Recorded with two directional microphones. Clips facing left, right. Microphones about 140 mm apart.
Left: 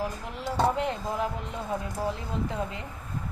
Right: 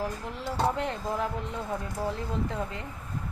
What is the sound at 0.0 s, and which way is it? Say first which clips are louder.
Speech: even; 15° left (ahead or behind).